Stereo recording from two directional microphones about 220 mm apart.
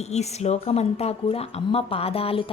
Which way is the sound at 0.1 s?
30° left (ahead or behind).